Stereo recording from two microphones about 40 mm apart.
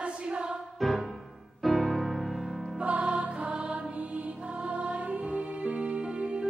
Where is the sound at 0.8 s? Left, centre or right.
Centre.